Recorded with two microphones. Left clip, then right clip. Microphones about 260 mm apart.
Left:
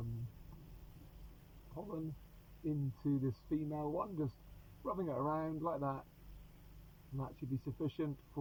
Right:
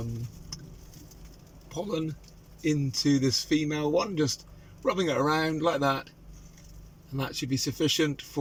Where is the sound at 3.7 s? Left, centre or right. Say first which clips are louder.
Right 13 dB; right.